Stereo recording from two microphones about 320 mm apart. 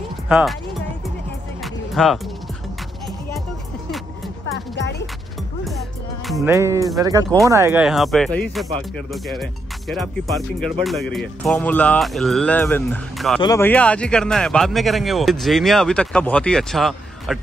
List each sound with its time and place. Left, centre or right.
0.3 s speech: centre
1.6 s music: centre
4.6 s music: left
6.2 s speech: centre